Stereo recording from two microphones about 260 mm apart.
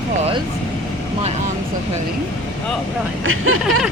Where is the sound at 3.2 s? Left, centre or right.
Right.